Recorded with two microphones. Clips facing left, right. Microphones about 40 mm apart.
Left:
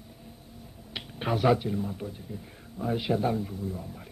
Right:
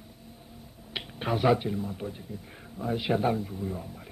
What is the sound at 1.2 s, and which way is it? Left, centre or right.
Speech, centre.